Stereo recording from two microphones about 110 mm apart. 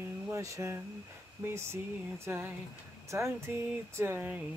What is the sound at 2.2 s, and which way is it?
Mantra, 20° right (ahead or behind).